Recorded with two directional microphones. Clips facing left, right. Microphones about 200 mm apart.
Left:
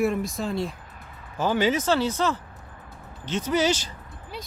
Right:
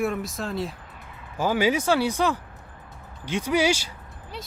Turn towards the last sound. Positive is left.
turn(degrees=-10)  # may be behind; listen again after turning